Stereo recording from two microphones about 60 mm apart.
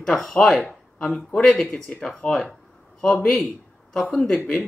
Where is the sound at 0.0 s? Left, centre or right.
Centre.